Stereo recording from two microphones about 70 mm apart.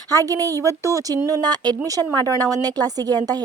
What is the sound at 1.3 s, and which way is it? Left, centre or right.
Speech, right.